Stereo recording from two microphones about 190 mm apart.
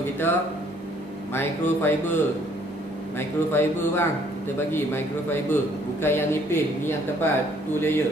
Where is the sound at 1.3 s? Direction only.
10° left (ahead or behind).